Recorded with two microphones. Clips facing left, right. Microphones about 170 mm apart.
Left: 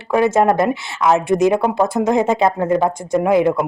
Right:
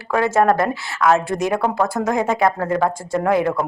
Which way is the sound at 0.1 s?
20° left (ahead or behind).